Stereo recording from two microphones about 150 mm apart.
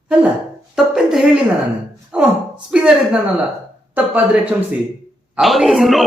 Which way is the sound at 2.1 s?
10° right (ahead or behind).